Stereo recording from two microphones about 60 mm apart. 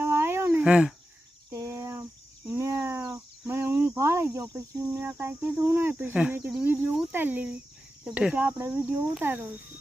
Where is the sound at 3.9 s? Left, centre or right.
Right.